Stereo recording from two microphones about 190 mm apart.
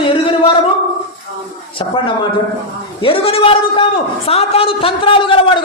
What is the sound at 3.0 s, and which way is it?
A man's voice, 30° left (ahead or behind).